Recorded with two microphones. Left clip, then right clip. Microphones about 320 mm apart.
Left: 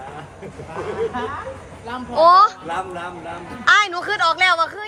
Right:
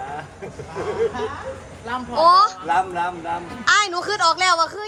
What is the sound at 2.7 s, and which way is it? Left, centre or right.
Speech, right.